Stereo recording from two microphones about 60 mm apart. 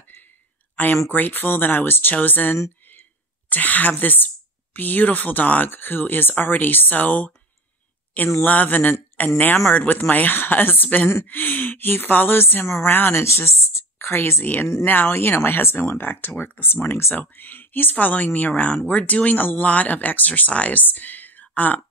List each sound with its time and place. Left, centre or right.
0.8 s speech: left
2.9 s whispering: left
4.7 s speech: left
8.4 s speech: left
13.1 s a woman's voice: left